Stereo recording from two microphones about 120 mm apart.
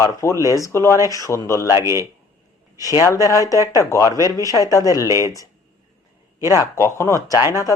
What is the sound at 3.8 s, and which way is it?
Speech, 25° left (ahead or behind).